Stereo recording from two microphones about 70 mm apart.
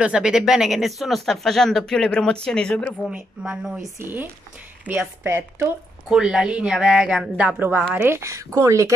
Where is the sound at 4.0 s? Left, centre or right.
Right.